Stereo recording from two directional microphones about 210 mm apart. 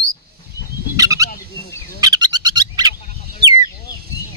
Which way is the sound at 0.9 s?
15° right (ahead or behind).